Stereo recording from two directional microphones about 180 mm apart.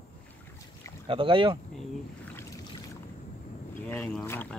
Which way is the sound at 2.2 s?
10° left (ahead or behind).